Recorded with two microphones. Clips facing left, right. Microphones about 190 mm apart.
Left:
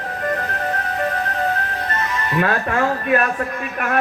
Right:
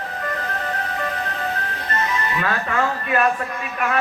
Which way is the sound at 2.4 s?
55° left (ahead or behind).